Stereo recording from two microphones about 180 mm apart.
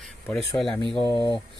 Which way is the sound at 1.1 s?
25° left (ahead or behind).